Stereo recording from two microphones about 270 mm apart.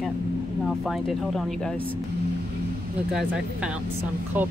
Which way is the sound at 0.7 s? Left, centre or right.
Centre.